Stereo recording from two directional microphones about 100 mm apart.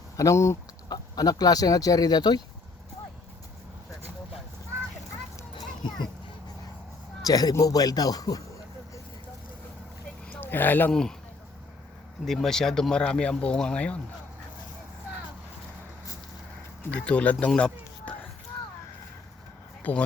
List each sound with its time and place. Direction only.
0.2 s speech: 30° left (ahead or behind)
5.8 s speech: 50° left (ahead or behind)
7.3 s speech: 40° left (ahead or behind)
10.4 s speech: 20° left (ahead or behind)
12.2 s speech: 5° left (ahead or behind)
16.9 s speech: 10° left (ahead or behind)
19.8 s speech: 10° left (ahead or behind)